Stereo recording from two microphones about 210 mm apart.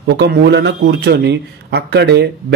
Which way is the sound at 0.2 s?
50° right (ahead or behind).